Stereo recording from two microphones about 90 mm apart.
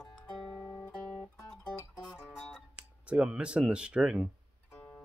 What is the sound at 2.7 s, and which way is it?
Speech, 10° right (ahead or behind).